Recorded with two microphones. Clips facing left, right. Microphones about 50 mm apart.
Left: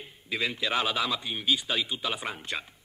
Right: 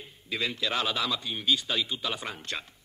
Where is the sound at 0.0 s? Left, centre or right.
Centre.